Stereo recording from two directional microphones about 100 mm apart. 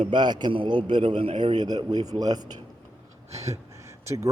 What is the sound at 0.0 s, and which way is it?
A man's voice, 50° right (ahead or behind).